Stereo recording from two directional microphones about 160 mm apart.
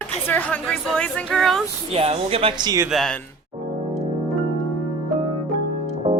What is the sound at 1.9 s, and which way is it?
Speech, 40° right (ahead or behind).